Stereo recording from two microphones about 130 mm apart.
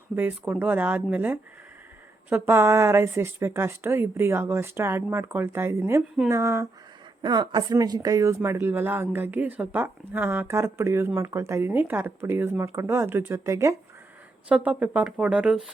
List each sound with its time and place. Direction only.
0.2 s speech: 15° right (ahead or behind)
7.2 s speech: 35° right (ahead or behind)
14.5 s speech: 10° right (ahead or behind)